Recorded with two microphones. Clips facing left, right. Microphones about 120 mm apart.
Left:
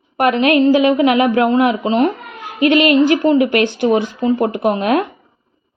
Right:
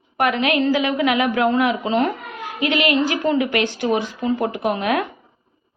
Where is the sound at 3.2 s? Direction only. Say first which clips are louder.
Left 6 dB; 25° left (ahead or behind).